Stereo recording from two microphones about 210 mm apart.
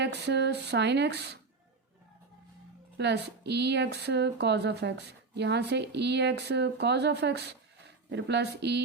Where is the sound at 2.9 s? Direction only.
55° right (ahead or behind).